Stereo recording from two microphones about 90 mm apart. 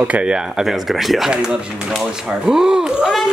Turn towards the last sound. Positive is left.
turn(degrees=-5)  # may be behind; listen again after turning